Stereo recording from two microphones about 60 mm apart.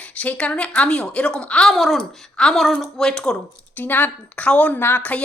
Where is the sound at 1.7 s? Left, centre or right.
Centre.